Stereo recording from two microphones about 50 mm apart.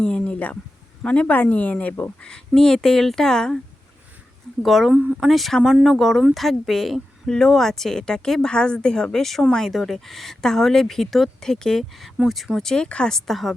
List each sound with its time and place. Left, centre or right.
0.0 s a sound: centre
1.0 s speech: left
1.3 s speech: left
2.0 s speech: centre
4.6 s speech: centre
9.1 s speech: centre
12.6 s speech: centre
13.1 s speech: centre